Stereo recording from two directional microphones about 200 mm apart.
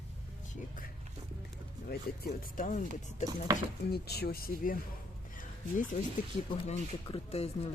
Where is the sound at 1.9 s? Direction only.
45° left (ahead or behind).